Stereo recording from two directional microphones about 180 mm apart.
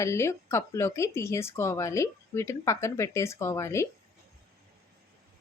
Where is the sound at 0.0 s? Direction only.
15° left (ahead or behind).